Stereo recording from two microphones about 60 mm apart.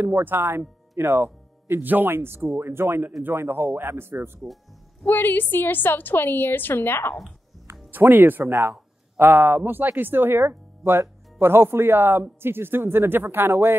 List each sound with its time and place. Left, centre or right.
0.0 s speech: right
5.0 s a woman's voice: left
7.9 s speech: right
8.5 s speech: right
9.2 s speech: right